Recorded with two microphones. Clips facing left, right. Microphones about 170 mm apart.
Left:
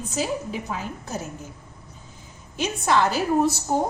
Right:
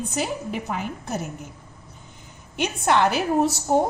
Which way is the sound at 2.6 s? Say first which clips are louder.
Right 1 dB; 65° right (ahead or behind).